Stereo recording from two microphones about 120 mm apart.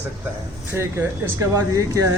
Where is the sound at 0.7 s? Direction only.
20° right (ahead or behind).